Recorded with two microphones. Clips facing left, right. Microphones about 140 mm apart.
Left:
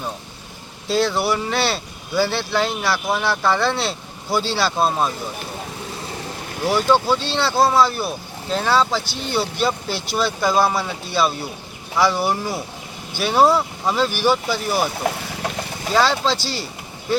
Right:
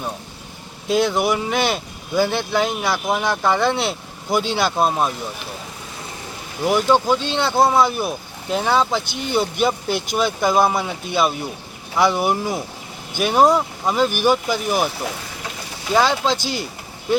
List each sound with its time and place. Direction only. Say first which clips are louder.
0.9 s speech: right 1 dB; 15° right (ahead or behind)
6.7 s speech: right 1 dB; 10° right (ahead or behind)
15.9 s speech: right 1 dB; 15° right (ahead or behind)